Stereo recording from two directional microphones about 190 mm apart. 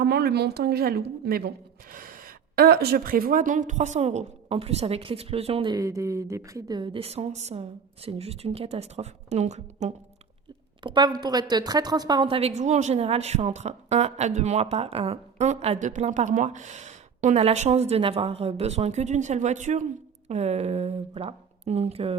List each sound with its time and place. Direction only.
0.0 s a woman's voice: 55° right (ahead or behind); by 5.7 s 30° right (ahead or behind)
5.7 s a woman's voice: 15° right (ahead or behind); by 9.9 s 35° right (ahead or behind)
10.8 s a woman's voice: 25° right (ahead or behind)